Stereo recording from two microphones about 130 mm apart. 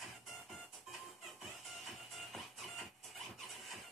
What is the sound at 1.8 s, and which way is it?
Music, centre (ahead or behind).